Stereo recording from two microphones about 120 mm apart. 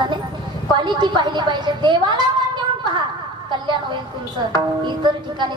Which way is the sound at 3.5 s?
40° right (ahead or behind).